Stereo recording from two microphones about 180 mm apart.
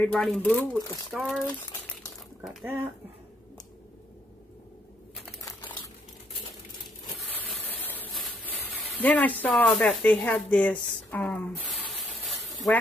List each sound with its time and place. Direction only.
0.0 s speech: 5° left (ahead or behind)
7.6 s a sound: 10° left (ahead or behind)
9.0 s speech: 10° left (ahead or behind)